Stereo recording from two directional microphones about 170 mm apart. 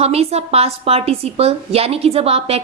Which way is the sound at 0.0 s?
35° right (ahead or behind).